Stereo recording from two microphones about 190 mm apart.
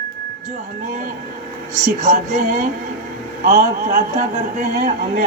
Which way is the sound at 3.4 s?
40° right (ahead or behind).